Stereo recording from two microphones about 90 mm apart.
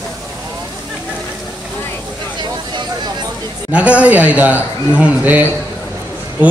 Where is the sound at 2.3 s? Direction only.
55° right (ahead or behind).